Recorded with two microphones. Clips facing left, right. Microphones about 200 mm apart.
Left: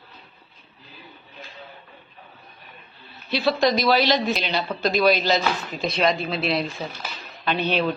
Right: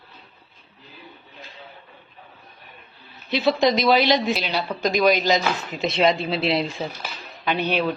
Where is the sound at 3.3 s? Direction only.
20° right (ahead or behind).